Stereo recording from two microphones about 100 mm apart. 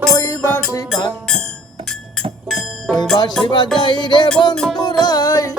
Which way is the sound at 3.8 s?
45° left (ahead or behind).